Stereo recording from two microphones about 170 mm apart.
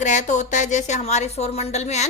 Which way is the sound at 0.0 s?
45° left (ahead or behind).